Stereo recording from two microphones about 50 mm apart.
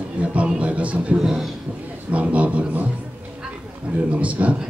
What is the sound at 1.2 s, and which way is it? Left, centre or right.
Speech, centre.